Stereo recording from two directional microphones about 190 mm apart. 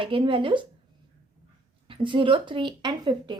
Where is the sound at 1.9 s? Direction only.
25° right (ahead or behind).